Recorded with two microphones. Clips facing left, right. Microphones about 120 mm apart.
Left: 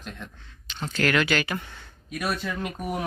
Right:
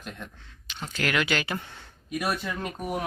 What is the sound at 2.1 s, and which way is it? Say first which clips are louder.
Speech: even; 5° right (ahead or behind).